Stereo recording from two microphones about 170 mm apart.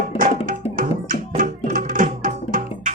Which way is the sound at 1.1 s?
55° right (ahead or behind).